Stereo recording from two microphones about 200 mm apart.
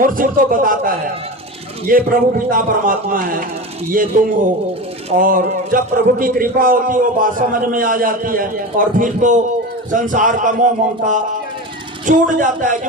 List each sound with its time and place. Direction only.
0.0 s a man's voice: 45° right (ahead or behind)